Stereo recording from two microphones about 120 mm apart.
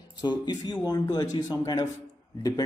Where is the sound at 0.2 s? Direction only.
35° left (ahead or behind).